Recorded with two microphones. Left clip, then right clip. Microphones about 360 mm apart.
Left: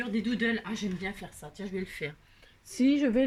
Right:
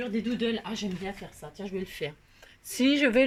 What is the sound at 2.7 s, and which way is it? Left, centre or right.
Speech, right.